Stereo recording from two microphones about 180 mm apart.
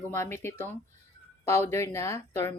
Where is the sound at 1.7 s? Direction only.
15° left (ahead or behind).